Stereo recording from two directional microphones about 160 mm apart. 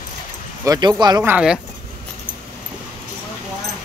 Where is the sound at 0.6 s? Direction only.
25° right (ahead or behind).